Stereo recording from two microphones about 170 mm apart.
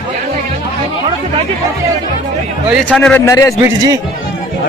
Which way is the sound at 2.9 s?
10° left (ahead or behind).